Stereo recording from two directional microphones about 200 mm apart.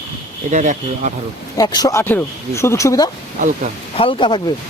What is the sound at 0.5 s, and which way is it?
Speech, 40° right (ahead or behind).